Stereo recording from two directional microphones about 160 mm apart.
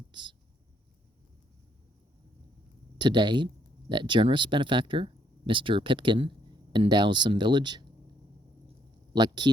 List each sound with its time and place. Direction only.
0.1 s speech: 30° right (ahead or behind)
3.0 s speech: 30° right (ahead or behind)
9.1 s speech: 25° right (ahead or behind)